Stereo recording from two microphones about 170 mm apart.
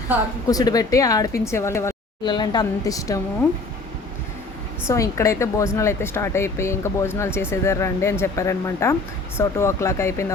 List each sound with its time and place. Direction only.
0.4 s a woman's voice: 20° left (ahead or behind)
4.9 s speech: 20° left (ahead or behind)